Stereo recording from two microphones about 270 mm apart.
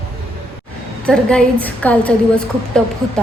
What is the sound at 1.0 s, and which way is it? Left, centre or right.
A woman's voice, centre.